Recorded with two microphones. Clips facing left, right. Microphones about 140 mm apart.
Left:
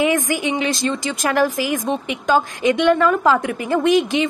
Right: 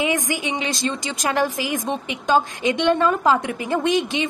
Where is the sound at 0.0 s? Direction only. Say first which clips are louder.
Left 4 dB; 20° right (ahead or behind).